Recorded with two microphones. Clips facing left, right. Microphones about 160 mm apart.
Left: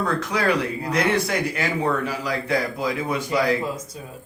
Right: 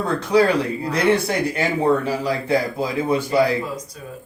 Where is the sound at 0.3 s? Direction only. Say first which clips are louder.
Right 10 dB; 30° right (ahead or behind).